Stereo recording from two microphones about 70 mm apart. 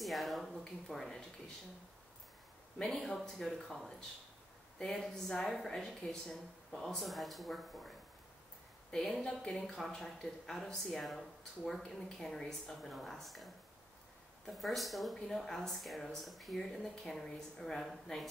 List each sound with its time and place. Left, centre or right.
0.0 s speech: centre
2.8 s speech: centre
8.9 s speech: centre